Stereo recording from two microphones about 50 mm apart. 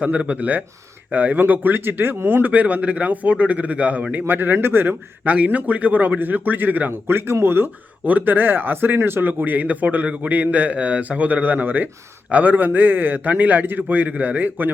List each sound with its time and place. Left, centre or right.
0.0 s speech: right
5.2 s speech: right
7.1 s speech: right
8.0 s speech: right